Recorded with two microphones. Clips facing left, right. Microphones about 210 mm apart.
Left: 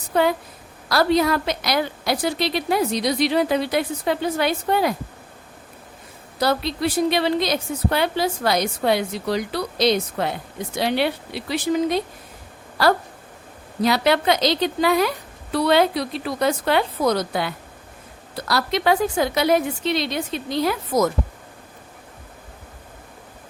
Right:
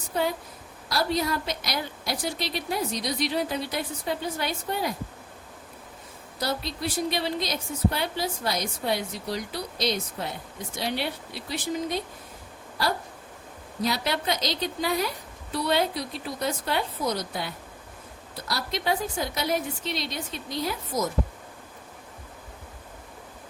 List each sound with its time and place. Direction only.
0.1 s a woman's voice: 75° left (ahead or behind)
6.4 s a woman's voice: 75° left (ahead or behind)
12.7 s a sound: 75° left (ahead or behind)
13.8 s a woman's voice: 75° left (ahead or behind)